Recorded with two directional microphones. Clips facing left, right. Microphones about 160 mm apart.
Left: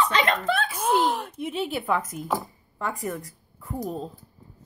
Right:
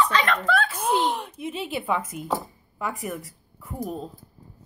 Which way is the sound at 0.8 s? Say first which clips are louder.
Left 1 dB; centre (ahead or behind).